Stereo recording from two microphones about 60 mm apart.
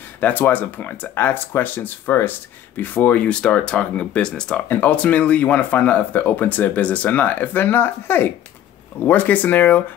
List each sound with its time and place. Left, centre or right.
0.2 s speech: left; by 4.6 s centre
4.6 s speech: left